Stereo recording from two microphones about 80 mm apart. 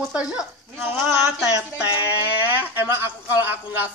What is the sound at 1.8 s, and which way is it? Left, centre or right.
Speech, right.